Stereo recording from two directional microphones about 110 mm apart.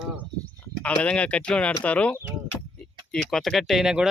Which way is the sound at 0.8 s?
10° left (ahead or behind).